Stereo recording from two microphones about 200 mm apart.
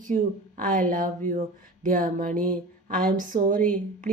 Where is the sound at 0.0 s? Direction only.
40° right (ahead or behind).